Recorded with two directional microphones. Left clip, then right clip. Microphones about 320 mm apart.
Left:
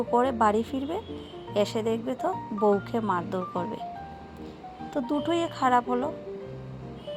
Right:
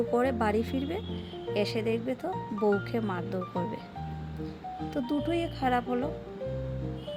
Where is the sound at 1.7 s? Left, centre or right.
Left.